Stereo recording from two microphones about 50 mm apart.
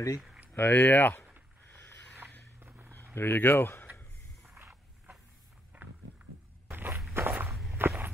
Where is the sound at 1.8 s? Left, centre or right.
Left.